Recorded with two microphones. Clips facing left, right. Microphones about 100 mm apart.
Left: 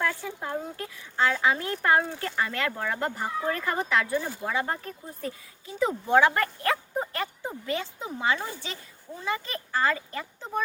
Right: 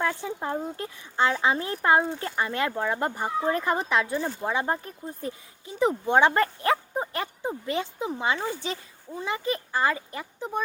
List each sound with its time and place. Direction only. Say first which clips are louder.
0.0 s a child's voice: right 2 dB; 20° right (ahead or behind)